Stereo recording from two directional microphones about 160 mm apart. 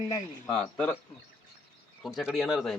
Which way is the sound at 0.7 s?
5° left (ahead or behind).